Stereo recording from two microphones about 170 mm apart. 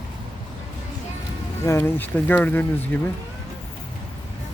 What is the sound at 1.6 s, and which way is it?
Speech, 15° left (ahead or behind).